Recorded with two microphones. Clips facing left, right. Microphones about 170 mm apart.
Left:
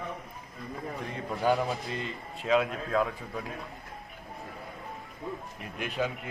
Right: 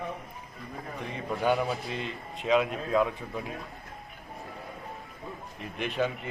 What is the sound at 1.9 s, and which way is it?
Speech, 65° right (ahead or behind).